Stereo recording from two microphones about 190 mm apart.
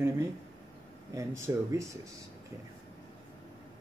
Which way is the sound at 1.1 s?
15° right (ahead or behind).